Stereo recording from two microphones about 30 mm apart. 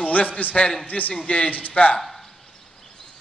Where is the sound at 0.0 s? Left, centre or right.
Left.